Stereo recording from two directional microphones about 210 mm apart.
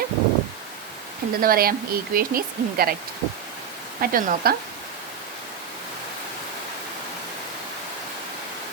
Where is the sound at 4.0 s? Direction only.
45° right (ahead or behind).